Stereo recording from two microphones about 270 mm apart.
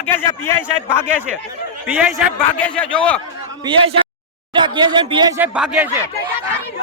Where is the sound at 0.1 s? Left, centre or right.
Centre.